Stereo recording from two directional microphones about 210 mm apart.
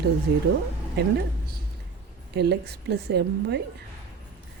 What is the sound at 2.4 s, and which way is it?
A woman's voice, 50° right (ahead or behind).